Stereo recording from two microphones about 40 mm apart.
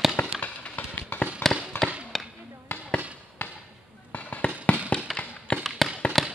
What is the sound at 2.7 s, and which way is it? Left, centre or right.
Fireworks, left.